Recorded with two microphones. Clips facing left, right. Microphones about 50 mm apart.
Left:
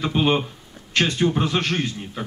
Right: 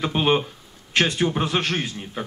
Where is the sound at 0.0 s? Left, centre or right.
Centre.